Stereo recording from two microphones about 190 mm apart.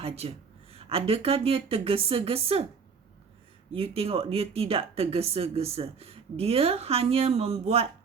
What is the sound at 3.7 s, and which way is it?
A woman's voice, 30° right (ahead or behind).